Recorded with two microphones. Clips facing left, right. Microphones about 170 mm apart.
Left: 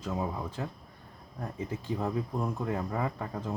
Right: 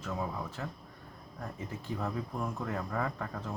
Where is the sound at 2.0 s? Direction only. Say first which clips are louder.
Left 3 dB; 15° left (ahead or behind).